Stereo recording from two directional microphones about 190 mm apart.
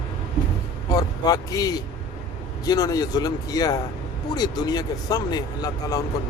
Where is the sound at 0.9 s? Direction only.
20° left (ahead or behind).